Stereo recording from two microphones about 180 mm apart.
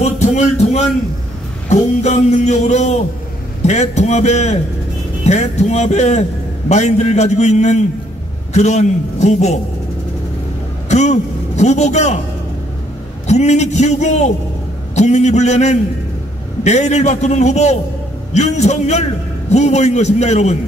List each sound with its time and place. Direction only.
0.0 s a sound: 40° left (ahead or behind)
1.7 s a man's voice: 40° left (ahead or behind)
10.9 s a man's voice: 40° left (ahead or behind)
13.3 s a man's voice: 40° left (ahead or behind)